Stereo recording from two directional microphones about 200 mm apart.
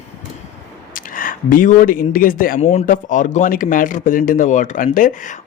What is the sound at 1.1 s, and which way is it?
Speech, 40° left (ahead or behind).